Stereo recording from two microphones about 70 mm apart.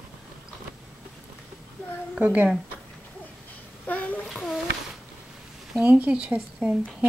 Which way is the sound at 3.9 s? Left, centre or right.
Left.